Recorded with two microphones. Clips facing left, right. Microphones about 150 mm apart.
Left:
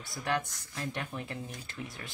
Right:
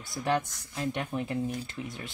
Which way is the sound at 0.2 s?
20° right (ahead or behind).